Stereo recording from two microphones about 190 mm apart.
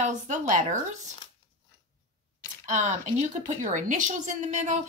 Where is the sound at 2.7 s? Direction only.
40° right (ahead or behind).